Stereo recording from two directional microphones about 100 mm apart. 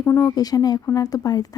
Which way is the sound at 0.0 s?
20° left (ahead or behind).